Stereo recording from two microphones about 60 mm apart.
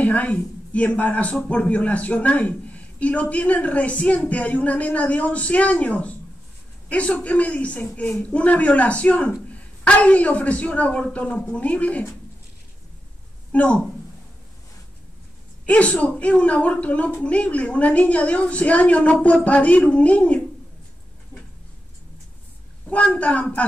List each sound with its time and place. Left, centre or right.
0.0 s a man's voice: left
13.5 s speech: left
15.6 s a man's voice: left
22.8 s a man's voice: left